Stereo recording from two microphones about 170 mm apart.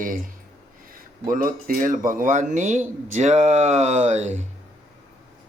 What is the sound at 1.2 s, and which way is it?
Speech, 55° right (ahead or behind).